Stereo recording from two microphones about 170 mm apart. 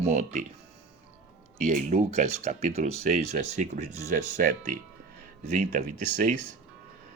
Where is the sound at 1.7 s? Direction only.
50° right (ahead or behind).